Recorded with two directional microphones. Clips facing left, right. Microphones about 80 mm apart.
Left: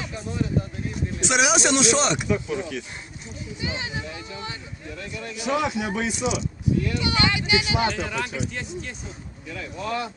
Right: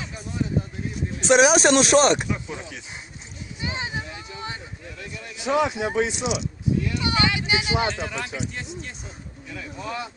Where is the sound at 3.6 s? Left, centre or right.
Right.